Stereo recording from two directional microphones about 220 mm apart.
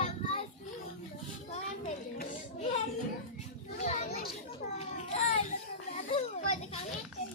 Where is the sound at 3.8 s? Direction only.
30° left (ahead or behind).